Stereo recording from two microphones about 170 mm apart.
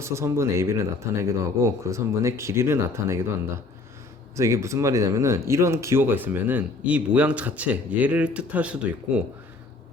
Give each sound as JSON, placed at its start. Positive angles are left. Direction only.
{"t": 0.0, "sound": "speech", "side_deg": -15}
{"t": 4.4, "sound": "speech", "side_deg": -15}